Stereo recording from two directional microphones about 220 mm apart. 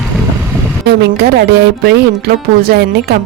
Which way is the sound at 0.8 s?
50° right (ahead or behind).